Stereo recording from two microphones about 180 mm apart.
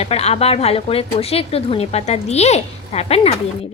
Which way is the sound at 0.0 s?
35° left (ahead or behind).